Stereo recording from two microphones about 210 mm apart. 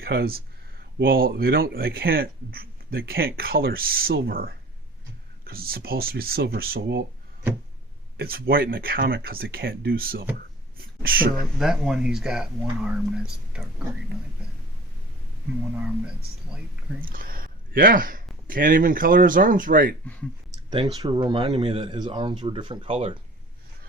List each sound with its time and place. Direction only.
0.0 s speech: 45° right (ahead or behind)
8.2 s speech: 45° right (ahead or behind)
11.6 s speech: centre (ahead or behind)
17.0 s speech: 45° right (ahead or behind)
20.7 s speech: 20° right (ahead or behind)